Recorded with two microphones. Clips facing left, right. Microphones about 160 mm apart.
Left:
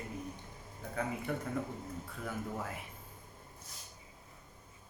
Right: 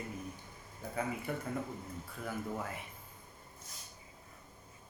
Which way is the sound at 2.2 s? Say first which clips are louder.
Right 1 dB; centre (ahead or behind).